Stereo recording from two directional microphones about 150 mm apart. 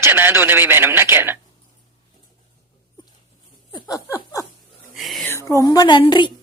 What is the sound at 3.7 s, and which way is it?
Laughter, 25° left (ahead or behind).